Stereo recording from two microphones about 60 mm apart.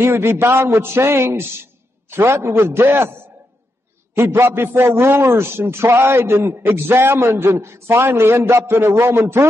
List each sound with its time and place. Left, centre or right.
0.0 s a man's voice: right
4.2 s a man's voice: right